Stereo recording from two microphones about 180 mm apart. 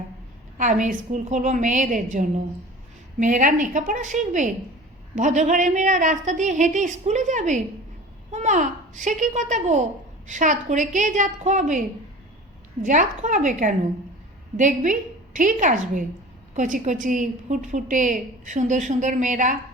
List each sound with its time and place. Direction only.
0.6 s a woman's voice: 45° right (ahead or behind)
12.8 s a woman's voice: 45° right (ahead or behind)